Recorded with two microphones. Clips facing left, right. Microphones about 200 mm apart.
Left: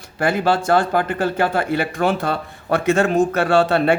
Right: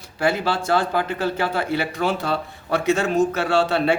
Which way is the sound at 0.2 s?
50° left (ahead or behind).